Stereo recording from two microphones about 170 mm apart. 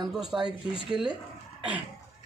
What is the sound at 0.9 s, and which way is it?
Speech, centre (ahead or behind).